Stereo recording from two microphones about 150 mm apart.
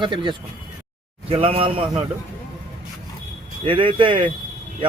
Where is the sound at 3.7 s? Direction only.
35° right (ahead or behind).